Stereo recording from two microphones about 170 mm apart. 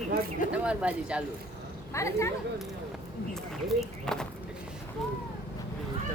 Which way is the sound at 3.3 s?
Centre (ahead or behind).